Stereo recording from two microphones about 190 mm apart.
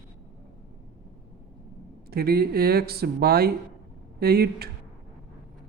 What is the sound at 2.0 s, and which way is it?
Speech, 55° right (ahead or behind).